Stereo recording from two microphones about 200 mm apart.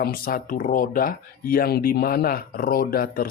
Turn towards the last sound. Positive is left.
turn(degrees=50)  # may be behind; listen again after turning